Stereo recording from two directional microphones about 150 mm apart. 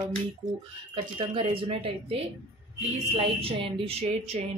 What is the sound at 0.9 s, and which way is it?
Speech, 35° right (ahead or behind).